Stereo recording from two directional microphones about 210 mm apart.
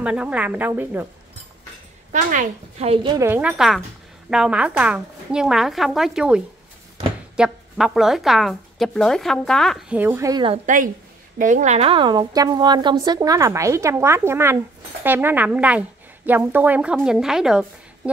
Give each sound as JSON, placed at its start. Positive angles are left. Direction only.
{"t": 0.0, "sound": "speech", "side_deg": -5}
{"t": 2.1, "sound": "a woman's voice", "side_deg": -35}
{"t": 3.3, "sound": "speech", "side_deg": -5}
{"t": 11.3, "sound": "speech", "side_deg": -35}